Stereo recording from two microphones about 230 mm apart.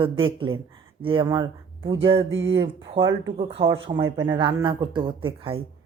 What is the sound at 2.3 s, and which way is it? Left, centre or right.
Speech, right.